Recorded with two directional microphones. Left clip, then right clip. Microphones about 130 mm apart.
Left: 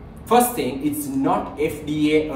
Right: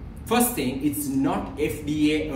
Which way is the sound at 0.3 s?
20° left (ahead or behind).